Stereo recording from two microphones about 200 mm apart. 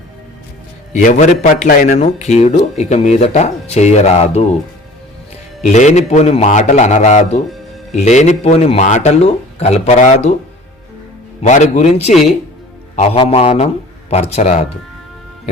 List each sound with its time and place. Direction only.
0.9 s a man's voice: 35° left (ahead or behind)
5.6 s a man's voice: 35° left (ahead or behind)
11.4 s a man's voice: 35° left (ahead or behind)